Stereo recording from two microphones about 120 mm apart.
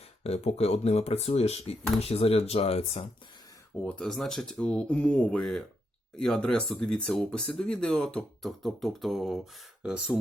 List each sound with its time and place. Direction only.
0.2 s speech: 60° left (ahead or behind)
3.8 s speech: 5° left (ahead or behind); by 10.2 s 10° right (ahead or behind)